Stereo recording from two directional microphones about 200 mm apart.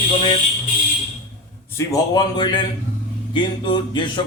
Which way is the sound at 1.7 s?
15° left (ahead or behind).